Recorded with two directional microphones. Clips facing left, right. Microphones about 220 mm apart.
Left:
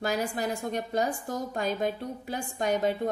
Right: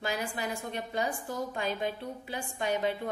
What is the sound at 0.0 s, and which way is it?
A woman's voice, 40° left (ahead or behind).